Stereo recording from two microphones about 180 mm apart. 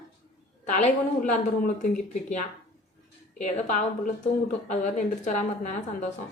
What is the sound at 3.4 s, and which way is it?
A woman's voice, 45° left (ahead or behind).